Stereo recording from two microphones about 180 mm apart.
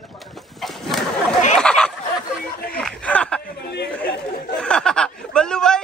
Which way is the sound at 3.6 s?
70° left (ahead or behind).